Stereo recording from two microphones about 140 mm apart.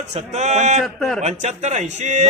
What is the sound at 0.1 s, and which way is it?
Speech, 55° right (ahead or behind).